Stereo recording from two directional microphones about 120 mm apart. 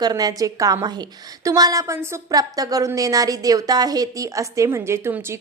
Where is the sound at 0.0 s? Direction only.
30° right (ahead or behind).